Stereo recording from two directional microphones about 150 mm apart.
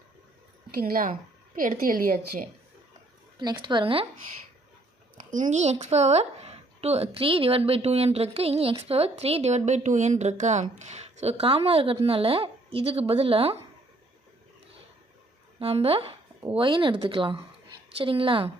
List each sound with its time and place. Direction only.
0.8 s speech: 80° right
1.5 s a woman's voice: 65° right (ahead or behind)
3.3 s speech: 30° right (ahead or behind)
5.3 s speech: 55° right (ahead or behind)
15.5 s speech: 40° right (ahead or behind)